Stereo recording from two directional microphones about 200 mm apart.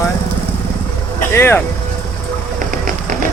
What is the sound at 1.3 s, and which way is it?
Speech, 10° left (ahead or behind).